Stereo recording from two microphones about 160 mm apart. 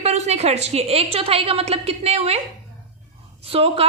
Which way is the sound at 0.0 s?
40° right (ahead or behind).